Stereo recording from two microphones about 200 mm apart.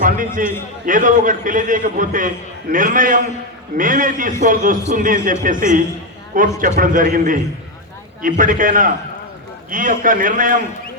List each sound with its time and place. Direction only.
0.0 s a man's voice: 40° right (ahead or behind)